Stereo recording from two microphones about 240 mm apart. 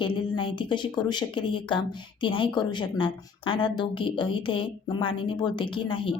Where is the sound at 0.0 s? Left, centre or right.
Left.